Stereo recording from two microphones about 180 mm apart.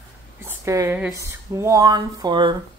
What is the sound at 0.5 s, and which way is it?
Speech, 15° right (ahead or behind).